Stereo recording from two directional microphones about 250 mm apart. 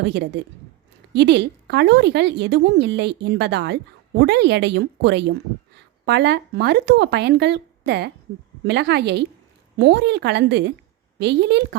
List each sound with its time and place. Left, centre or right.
0.0 s a woman's voice: right